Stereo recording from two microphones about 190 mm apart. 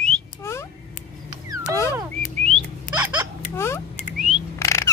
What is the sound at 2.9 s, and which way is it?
Hiccup, 10° right (ahead or behind).